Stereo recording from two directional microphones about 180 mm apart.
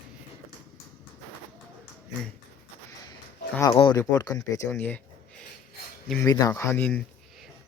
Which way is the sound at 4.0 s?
15° left (ahead or behind).